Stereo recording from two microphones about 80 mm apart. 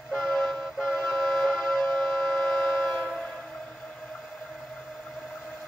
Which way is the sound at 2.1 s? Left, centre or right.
Centre.